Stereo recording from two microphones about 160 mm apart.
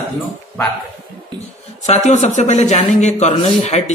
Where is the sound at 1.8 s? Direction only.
45° left (ahead or behind).